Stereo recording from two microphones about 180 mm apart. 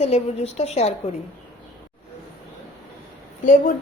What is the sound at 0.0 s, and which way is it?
Speech, 35° left (ahead or behind).